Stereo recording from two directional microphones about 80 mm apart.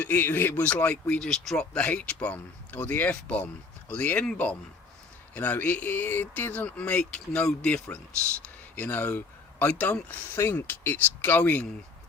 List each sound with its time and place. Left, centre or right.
0.0 s speech: left
10.3 s speech: left